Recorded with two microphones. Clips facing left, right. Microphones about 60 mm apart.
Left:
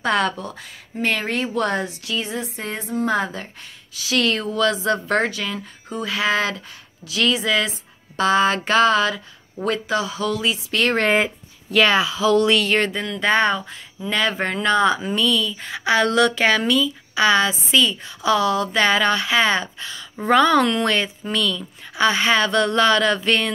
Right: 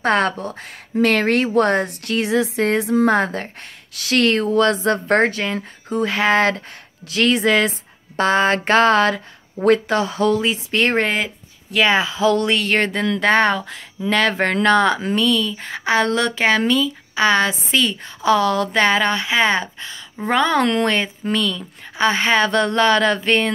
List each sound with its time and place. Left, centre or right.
0.0 s speech: right
0.9 s a woman's voice: right
3.1 s speech: right
13.0 s a woman's voice: right
15.2 s a woman's voice: right
17.5 s speech: right
20.6 s speech: right